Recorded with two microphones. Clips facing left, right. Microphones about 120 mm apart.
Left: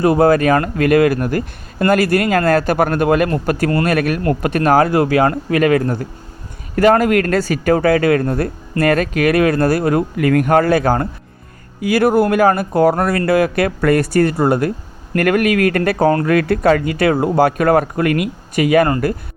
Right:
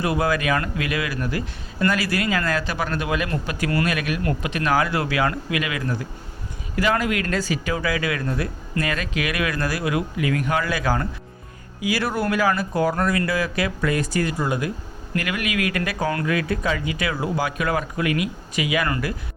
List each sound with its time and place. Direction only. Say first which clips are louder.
0.0 s speech: left 10 dB; 40° left (ahead or behind)